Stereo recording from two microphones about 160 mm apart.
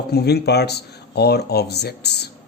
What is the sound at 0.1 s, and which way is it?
Speech, 90° left.